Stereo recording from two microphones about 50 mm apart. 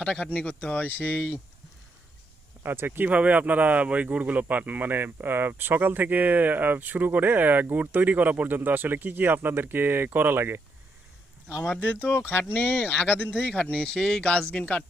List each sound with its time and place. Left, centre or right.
0.0 s speech: left
2.6 s speech: right
3.1 s speech: right
11.8 s speech: left
13.9 s speech: centre